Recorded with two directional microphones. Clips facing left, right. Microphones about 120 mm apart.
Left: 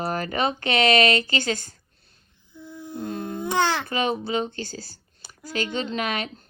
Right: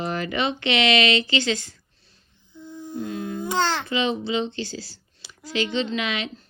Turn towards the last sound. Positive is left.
turn(degrees=50)  # may be behind; listen again after turning